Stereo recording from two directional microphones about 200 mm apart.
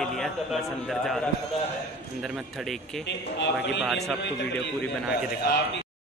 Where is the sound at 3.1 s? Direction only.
60° left (ahead or behind).